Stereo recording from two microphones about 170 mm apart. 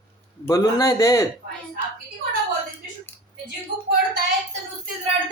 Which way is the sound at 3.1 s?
10° left (ahead or behind).